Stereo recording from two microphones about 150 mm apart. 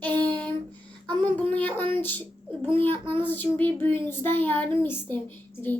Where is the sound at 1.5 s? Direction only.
10° left (ahead or behind).